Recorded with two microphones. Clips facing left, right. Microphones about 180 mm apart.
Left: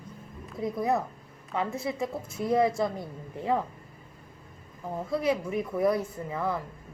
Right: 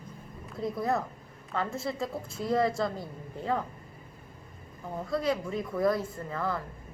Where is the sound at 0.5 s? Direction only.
20° left (ahead or behind).